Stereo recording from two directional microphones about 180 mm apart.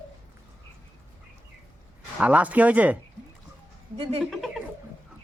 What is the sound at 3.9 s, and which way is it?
Speech, 30° right (ahead or behind).